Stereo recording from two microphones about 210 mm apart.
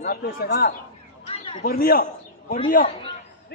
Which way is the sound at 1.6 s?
45° left (ahead or behind).